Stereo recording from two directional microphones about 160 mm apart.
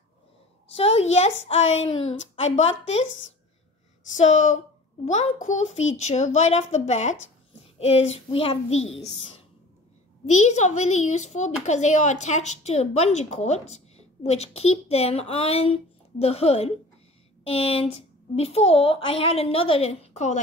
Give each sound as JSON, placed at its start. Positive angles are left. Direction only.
{"t": 0.7, "sound": "a child's voice", "side_deg": 40}
{"t": 1.9, "sound": "a woman's voice", "side_deg": 30}
{"t": 2.1, "sound": "a child's voice", "side_deg": 45}
{"t": 4.2, "sound": "a child's voice", "side_deg": 50}
{"t": 10.2, "sound": "a child's voice", "side_deg": 45}